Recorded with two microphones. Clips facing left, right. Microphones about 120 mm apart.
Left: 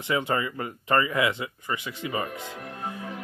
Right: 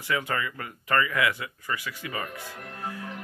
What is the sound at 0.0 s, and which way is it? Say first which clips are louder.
Speech: left 3 dB; 25° left (ahead or behind).